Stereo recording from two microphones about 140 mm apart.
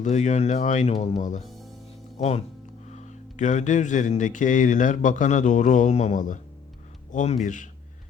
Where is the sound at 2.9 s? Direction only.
60° left (ahead or behind).